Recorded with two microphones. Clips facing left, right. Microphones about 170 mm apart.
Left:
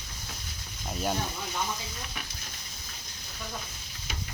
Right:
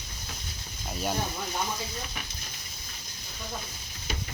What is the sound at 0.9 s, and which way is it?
Speech, centre (ahead or behind).